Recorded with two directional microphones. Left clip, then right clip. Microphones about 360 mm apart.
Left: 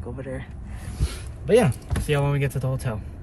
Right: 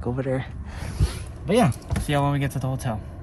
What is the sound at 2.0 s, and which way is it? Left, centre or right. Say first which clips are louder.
Speech: right 1 dB; centre.